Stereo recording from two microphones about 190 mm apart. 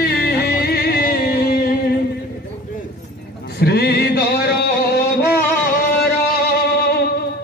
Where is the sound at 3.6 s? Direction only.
55° left (ahead or behind).